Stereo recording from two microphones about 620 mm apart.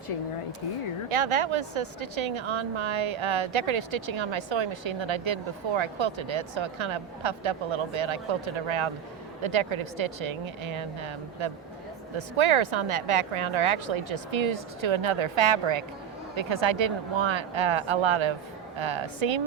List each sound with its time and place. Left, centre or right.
1.1 s a woman's voice: right